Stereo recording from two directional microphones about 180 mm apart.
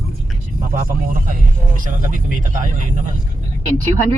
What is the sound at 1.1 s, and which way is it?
Speech, 50° right (ahead or behind).